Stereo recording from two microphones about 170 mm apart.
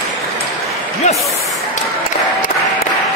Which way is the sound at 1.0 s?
45° left (ahead or behind).